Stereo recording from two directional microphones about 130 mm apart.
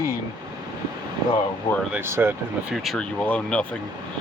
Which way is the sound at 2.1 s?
20° right (ahead or behind).